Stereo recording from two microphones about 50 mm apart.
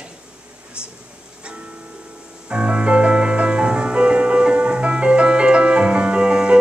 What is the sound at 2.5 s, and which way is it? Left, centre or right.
Music, centre.